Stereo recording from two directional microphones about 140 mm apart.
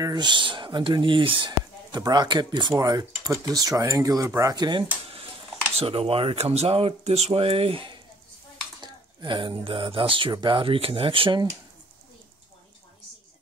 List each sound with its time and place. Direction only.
0.0 s speech: 30° right (ahead or behind)
5.8 s speech: 40° right (ahead or behind)